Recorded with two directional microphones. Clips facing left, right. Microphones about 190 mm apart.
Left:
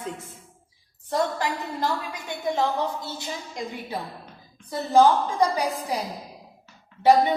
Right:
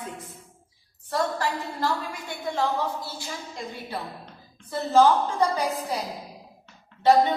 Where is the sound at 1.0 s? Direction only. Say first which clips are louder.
Left 1 dB; 20° left (ahead or behind).